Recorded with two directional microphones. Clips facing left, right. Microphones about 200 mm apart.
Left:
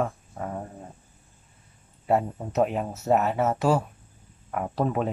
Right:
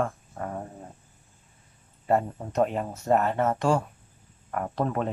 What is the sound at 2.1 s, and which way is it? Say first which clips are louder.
Speech: left 1 dB; 5° left (ahead or behind).